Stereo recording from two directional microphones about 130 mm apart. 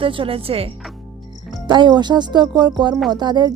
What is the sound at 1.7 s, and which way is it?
Speech, 35° right (ahead or behind).